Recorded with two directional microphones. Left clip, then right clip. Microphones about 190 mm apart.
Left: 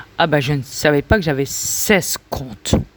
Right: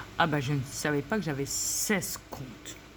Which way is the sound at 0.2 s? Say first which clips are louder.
Left 12 dB; 45° left (ahead or behind).